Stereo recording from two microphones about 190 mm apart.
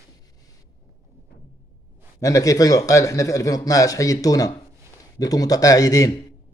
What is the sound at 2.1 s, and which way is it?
A man's voice, 15° left (ahead or behind).